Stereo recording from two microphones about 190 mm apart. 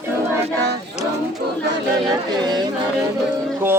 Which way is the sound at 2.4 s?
25° right (ahead or behind).